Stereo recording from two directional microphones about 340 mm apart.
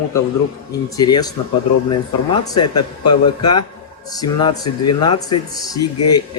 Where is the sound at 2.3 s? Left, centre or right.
Centre.